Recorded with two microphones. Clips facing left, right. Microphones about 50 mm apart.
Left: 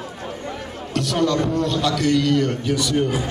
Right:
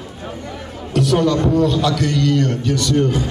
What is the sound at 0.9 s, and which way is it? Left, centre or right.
A man's voice, centre.